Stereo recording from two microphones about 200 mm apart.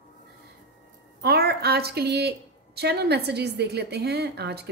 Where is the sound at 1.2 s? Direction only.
50° right (ahead or behind).